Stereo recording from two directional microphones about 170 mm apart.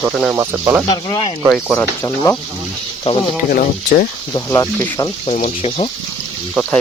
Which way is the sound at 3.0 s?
30° left (ahead or behind).